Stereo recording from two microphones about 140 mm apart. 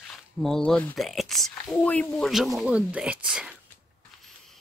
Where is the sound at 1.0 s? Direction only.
Centre (ahead or behind).